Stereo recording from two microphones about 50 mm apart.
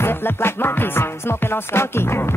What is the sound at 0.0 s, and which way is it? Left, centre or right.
Music, left.